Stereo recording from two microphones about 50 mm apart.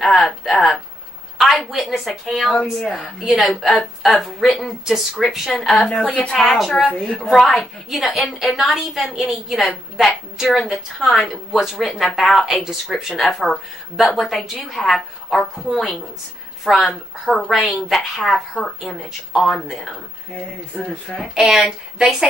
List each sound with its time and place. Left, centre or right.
0.3 s a woman's voice: centre
2.5 s a woman's voice: centre
2.9 s a woman's voice: centre
6.1 s a woman's voice: left
6.4 s a woman's voice: centre
12.4 s a woman's voice: centre
21.1 s a woman's voice: centre
21.5 s speech: centre